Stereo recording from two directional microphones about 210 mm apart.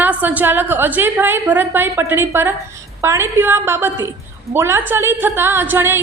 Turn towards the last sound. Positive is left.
turn(degrees=-10)  # may be behind; listen again after turning